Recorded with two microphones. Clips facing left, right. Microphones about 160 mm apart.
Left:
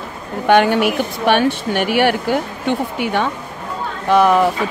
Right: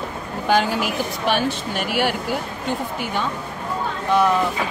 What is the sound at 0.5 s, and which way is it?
Speech, 65° left (ahead or behind).